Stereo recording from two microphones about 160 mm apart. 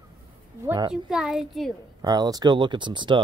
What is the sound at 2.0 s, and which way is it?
Speech, 25° right (ahead or behind).